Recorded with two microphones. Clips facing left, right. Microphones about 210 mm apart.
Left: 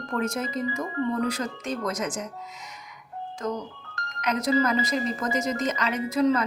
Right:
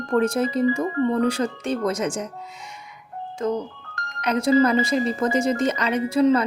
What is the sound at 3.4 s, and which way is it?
A woman's voice, 30° right (ahead or behind).